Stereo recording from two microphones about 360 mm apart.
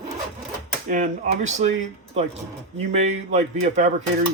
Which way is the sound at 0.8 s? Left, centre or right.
Right.